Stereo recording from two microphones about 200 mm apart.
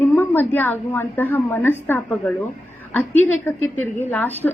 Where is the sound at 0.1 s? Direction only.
10° left (ahead or behind).